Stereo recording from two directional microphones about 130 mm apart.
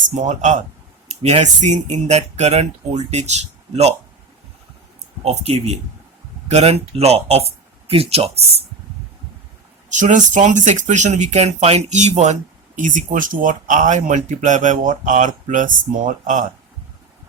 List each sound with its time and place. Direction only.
0.1 s speech: 70° right (ahead or behind)
1.0 s speech: 55° right (ahead or behind)
5.2 s speech: 55° right (ahead or behind)
9.9 s speech: 70° right (ahead or behind)